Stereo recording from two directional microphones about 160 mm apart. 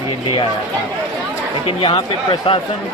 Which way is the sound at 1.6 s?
35° left (ahead or behind).